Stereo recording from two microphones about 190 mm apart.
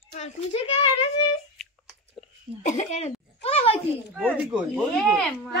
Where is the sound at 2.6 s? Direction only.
40° left (ahead or behind).